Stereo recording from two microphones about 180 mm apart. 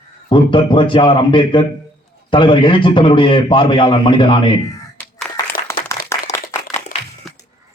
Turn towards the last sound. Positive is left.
turn(degrees=50)  # may be behind; listen again after turning